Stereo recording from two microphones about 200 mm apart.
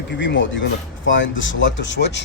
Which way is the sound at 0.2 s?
65° left (ahead or behind).